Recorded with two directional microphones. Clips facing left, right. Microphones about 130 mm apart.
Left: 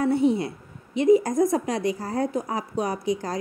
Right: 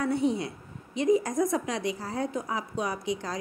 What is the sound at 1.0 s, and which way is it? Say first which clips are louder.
A woman's voice: left 6 dB; 35° left (ahead or behind).